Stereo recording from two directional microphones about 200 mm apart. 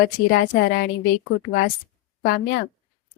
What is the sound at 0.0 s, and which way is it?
Speech, 50° left (ahead or behind).